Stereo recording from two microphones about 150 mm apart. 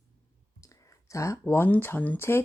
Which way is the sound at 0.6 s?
20° left (ahead or behind).